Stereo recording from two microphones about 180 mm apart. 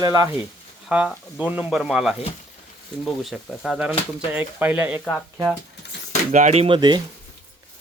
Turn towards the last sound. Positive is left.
turn(degrees=-25)  # may be behind; listen again after turning